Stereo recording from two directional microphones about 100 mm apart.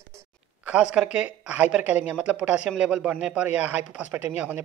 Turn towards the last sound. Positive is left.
turn(degrees=-15)  # may be behind; listen again after turning